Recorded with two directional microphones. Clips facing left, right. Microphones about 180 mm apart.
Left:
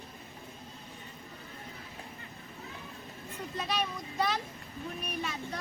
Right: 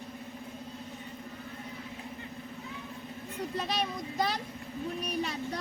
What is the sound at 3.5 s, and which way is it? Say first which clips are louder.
Speech: even; 35° right (ahead or behind).